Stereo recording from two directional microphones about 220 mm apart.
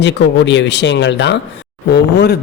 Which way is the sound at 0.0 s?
55° left (ahead or behind).